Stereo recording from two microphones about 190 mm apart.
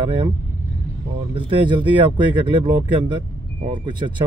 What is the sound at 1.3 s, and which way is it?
Speech, 25° right (ahead or behind).